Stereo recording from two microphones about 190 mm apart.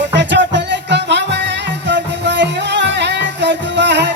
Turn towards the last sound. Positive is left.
turn(degrees=-65)  # may be behind; listen again after turning